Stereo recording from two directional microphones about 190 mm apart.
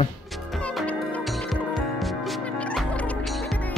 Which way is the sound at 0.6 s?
5° left (ahead or behind).